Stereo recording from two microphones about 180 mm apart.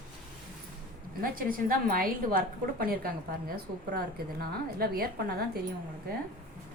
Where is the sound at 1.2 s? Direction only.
55° right (ahead or behind).